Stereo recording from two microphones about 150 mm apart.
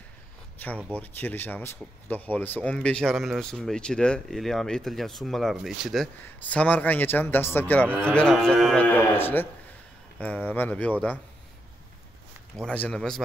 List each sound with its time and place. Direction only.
0.6 s speech: 10° left (ahead or behind)
6.5 s speech: 10° left (ahead or behind)
12.6 s speech: 5° left (ahead or behind)